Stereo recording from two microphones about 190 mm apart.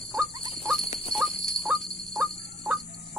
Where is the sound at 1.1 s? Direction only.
Centre (ahead or behind).